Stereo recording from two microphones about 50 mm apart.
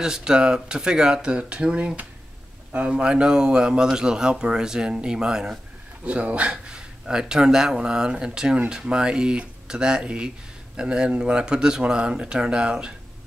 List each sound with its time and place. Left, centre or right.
0.0 s speech: centre; by 3.0 s right
3.0 s speech: centre